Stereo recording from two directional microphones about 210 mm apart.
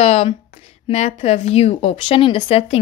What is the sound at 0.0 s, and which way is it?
A woman's voice, 30° left (ahead or behind).